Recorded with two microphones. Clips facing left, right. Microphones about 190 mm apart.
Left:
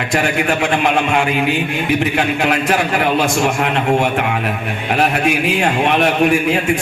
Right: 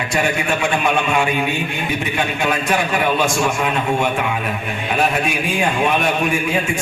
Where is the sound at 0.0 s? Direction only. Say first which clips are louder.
Left 3 dB; 65° left (ahead or behind).